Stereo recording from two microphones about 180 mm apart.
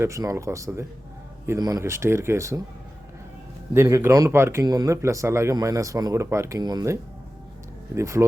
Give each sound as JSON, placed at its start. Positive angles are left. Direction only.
{"t": 0.0, "sound": "speech", "side_deg": -15}
{"t": 3.8, "sound": "speech", "side_deg": -15}